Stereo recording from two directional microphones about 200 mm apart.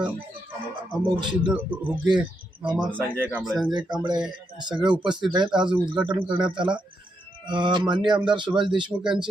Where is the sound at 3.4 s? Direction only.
Centre (ahead or behind).